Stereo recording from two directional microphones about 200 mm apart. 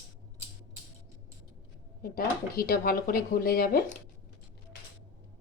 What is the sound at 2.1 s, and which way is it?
Speech, 50° left (ahead or behind).